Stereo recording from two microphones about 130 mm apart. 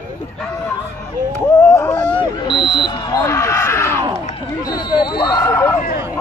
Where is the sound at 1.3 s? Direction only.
20° left (ahead or behind).